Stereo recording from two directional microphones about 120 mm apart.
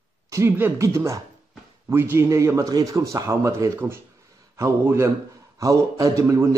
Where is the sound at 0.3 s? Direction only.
20° right (ahead or behind).